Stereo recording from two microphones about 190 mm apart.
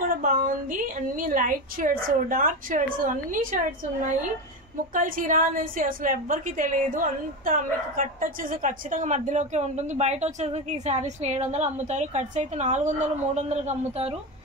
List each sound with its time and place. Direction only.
0.1 s a woman's voice: 45° right (ahead or behind)
4.9 s a woman's voice: 45° right (ahead or behind)